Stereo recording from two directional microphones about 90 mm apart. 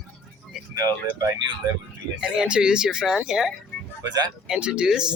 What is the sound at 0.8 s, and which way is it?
Speech, 45° right (ahead or behind).